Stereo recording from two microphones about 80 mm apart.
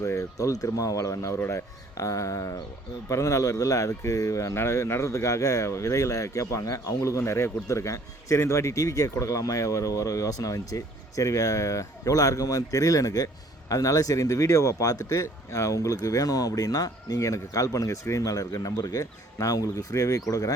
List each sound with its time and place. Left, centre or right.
0.0 s speech: left